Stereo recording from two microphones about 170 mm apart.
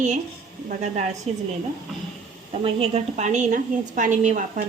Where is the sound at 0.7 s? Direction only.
45° right (ahead or behind).